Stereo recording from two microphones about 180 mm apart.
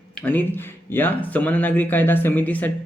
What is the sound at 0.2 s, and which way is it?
Speech, 10° left (ahead or behind).